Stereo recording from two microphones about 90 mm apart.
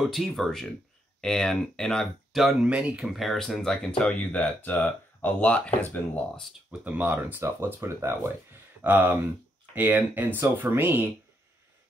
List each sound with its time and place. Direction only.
0.0 s speech: centre (ahead or behind)
2.6 s speech: 10° right (ahead or behind)
3.1 s speech: centre (ahead or behind); by 6.2 s 20° left (ahead or behind)
6.8 s speech: 20° right (ahead or behind)